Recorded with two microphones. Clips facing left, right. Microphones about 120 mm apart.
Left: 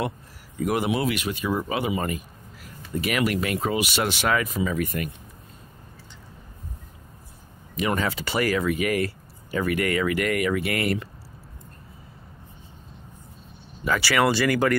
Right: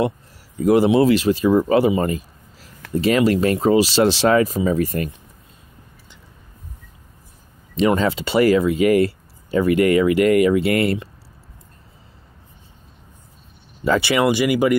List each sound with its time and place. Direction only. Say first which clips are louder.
0.6 s speech: right 10 dB; 25° right (ahead or behind)
7.7 s speech: right 8 dB; 25° right (ahead or behind)
13.8 s speech: right 5 dB; 25° right (ahead or behind)